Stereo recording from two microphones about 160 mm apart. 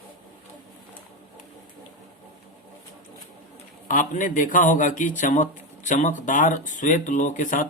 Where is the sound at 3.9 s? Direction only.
55° left (ahead or behind).